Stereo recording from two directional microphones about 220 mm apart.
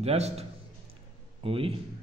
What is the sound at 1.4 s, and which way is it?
Speech, 25° right (ahead or behind).